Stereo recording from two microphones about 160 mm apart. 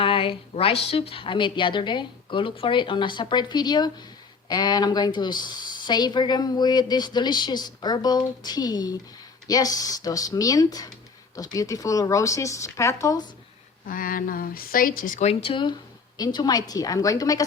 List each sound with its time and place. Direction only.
0.0 s a woman's voice: 35° left (ahead or behind)
13.8 s speech: 60° left (ahead or behind)
15.3 s a woman's voice: 35° left (ahead or behind)